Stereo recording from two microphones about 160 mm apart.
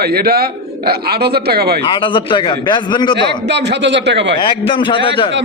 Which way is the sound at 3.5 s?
90° right.